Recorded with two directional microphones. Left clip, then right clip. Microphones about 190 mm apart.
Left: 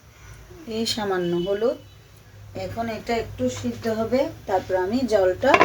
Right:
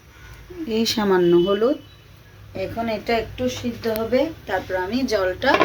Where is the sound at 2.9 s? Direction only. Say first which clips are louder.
Right 5 dB; 20° right (ahead or behind).